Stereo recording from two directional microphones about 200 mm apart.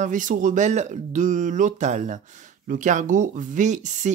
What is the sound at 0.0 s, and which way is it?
Speech, 40° right (ahead or behind).